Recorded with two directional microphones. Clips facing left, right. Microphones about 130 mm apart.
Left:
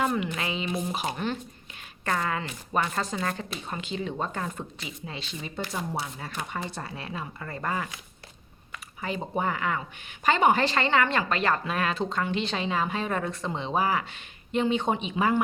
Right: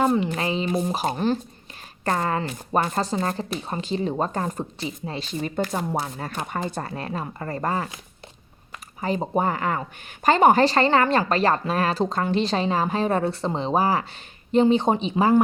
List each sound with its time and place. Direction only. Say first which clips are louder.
0.0 s speech: right 6 dB; 30° right (ahead or behind)